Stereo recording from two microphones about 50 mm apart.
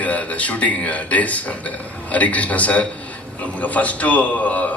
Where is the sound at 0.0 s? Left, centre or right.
Left.